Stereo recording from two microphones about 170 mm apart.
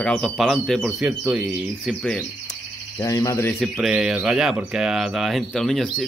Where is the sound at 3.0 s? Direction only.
20° left (ahead or behind).